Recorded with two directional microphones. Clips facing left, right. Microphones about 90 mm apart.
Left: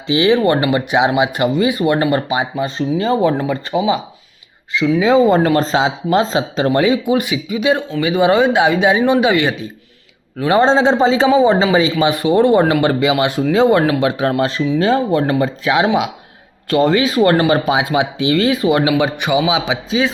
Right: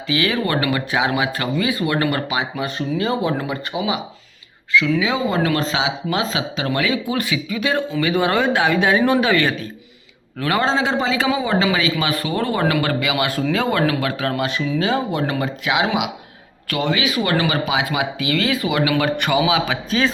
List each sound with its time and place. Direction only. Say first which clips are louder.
0.1 s speech: left 7 dB; 25° left (ahead or behind)
7.1 s speech: left 6 dB; 15° left (ahead or behind); by 17.8 s 40° left (ahead or behind)
17.8 s speech: left 6 dB; 25° left (ahead or behind)